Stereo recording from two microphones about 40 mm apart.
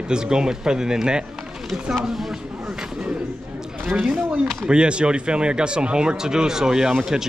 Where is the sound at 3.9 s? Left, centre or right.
Centre.